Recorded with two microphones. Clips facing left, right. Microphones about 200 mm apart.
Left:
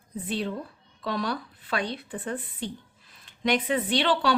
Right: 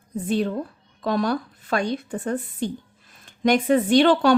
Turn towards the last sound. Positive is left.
turn(degrees=-45)  # may be behind; listen again after turning